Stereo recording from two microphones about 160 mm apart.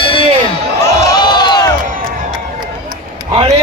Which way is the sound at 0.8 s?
25° left (ahead or behind).